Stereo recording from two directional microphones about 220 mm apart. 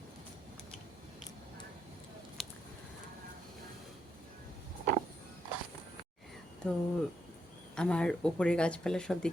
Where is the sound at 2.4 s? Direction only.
Centre (ahead or behind).